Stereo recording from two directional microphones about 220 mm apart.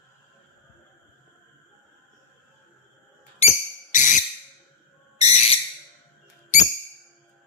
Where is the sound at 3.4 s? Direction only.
30° left (ahead or behind).